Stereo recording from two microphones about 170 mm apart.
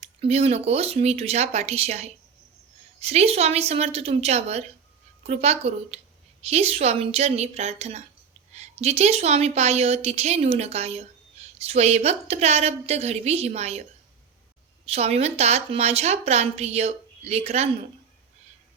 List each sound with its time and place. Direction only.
0.2 s a woman's voice: 35° right (ahead or behind)
14.8 s a woman's voice: 35° right (ahead or behind)